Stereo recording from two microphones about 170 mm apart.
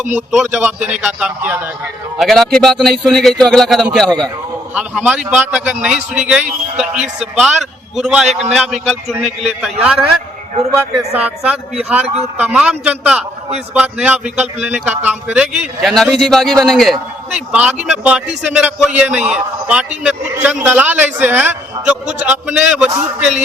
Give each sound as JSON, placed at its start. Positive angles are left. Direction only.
{"t": 0.2, "sound": "a man's voice", "side_deg": 0}
{"t": 2.1, "sound": "a man's voice", "side_deg": 0}
{"t": 4.7, "sound": "a man's voice", "side_deg": -5}
{"t": 11.1, "sound": "a man's voice", "side_deg": -10}
{"t": 12.0, "sound": "a man's voice", "side_deg": -40}
{"t": 12.4, "sound": "a man's voice", "side_deg": -5}